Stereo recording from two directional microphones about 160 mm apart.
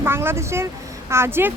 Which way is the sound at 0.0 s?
15° right (ahead or behind).